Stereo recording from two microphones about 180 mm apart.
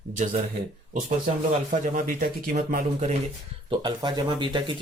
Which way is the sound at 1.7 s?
45° right (ahead or behind).